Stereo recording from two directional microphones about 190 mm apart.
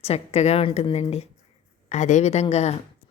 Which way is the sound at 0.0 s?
35° left (ahead or behind).